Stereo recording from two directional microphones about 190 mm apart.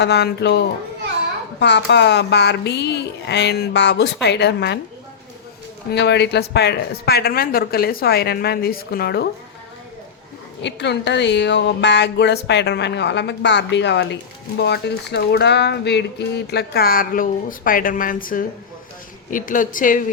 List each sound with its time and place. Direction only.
0.0 s speech: 60° left (ahead or behind)
5.9 s speech: 65° left (ahead or behind)
10.6 s a woman's voice: 65° left (ahead or behind); by 20.0 s 45° left (ahead or behind)